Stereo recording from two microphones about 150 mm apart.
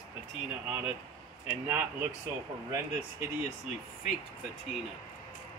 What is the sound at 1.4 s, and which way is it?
Speech, 10° right (ahead or behind).